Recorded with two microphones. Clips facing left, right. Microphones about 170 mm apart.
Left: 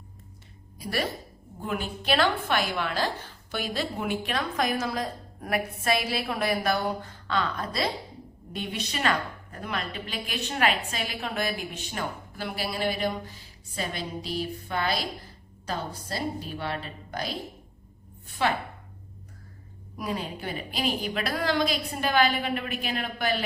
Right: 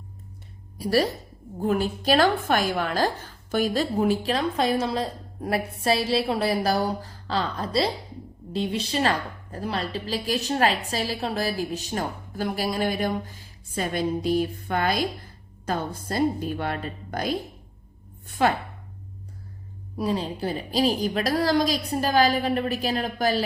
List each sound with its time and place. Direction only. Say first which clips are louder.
0.8 s a woman's voice: right 8 dB; 35° right (ahead or behind)
18.4 s a woman's voice: right 4 dB; 45° right (ahead or behind)
20.0 s a woman's voice: right 6 dB; 30° right (ahead or behind)